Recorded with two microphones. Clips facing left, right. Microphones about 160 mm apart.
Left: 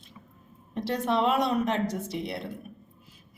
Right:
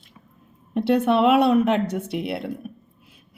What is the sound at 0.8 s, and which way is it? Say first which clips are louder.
Speech: right 8 dB; 65° right (ahead or behind).